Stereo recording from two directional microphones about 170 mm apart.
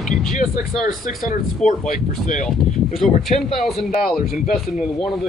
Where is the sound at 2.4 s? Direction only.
Centre (ahead or behind).